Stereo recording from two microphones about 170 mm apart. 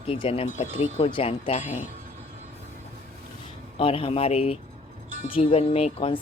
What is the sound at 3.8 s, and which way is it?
Speech, 30° left (ahead or behind).